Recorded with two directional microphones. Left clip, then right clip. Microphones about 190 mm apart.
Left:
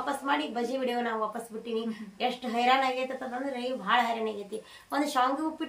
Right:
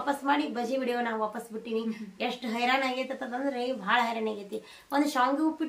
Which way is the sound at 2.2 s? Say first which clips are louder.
Left 2 dB; 20° right (ahead or behind).